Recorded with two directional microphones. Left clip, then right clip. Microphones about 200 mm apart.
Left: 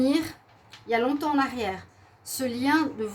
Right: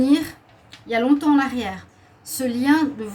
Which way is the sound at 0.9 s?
45° left (ahead or behind).